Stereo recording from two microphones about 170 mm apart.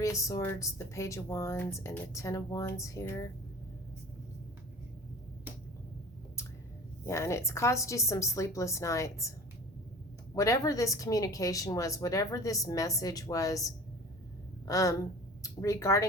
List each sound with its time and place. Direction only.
0.0 s speech: 20° left (ahead or behind)
7.0 s speech: 15° left (ahead or behind)
10.3 s a woman's voice: 20° left (ahead or behind)